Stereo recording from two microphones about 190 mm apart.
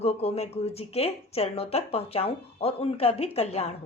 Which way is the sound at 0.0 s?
35° left (ahead or behind).